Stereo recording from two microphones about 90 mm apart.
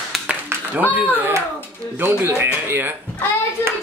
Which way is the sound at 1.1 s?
25° right (ahead or behind).